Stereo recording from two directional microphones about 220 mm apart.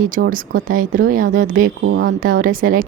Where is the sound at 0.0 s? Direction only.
40° right (ahead or behind).